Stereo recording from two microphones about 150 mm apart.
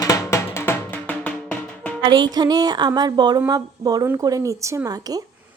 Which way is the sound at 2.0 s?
30° right (ahead or behind).